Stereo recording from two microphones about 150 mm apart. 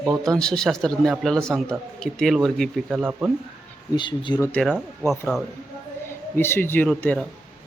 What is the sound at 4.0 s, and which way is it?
Speech, 30° left (ahead or behind).